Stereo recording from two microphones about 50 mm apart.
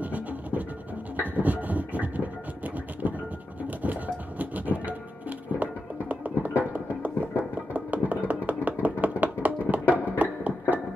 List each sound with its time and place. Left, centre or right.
0.0 s music: right